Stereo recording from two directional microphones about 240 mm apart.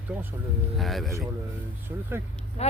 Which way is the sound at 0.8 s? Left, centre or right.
Centre.